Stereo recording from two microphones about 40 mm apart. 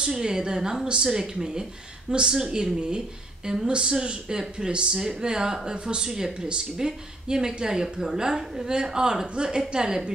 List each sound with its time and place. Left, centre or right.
0.2 s a woman's voice: centre
4.4 s a woman's voice: centre